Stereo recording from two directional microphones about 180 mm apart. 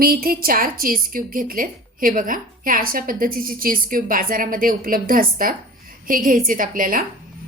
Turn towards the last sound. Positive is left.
turn(degrees=-50)  # may be behind; listen again after turning